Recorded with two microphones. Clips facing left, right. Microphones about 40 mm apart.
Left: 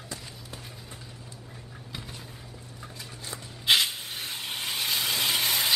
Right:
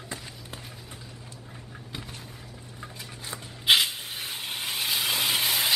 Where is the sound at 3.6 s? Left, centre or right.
Centre.